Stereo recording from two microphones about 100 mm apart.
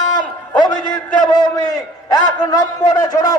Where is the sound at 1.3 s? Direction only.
45° left (ahead or behind).